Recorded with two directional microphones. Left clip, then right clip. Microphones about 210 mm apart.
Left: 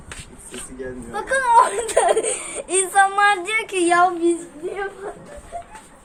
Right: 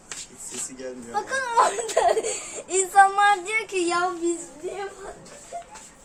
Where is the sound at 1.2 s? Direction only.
45° left (ahead or behind).